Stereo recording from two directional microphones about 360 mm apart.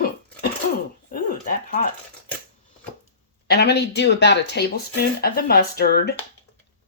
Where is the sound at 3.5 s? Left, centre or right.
Left.